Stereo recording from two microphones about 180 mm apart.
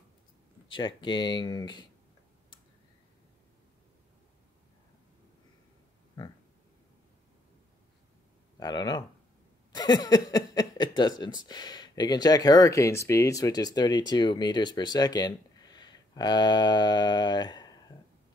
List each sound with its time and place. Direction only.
0.7 s speech: 25° left (ahead or behind)
8.5 s speech: 25° left (ahead or behind)